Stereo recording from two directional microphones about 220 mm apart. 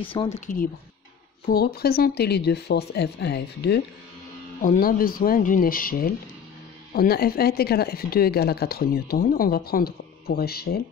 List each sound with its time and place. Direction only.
0.0 s speech: 25° left (ahead or behind)
1.4 s speech: 45° left (ahead or behind)